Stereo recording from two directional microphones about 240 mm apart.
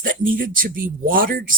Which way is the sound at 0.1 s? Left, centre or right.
Right.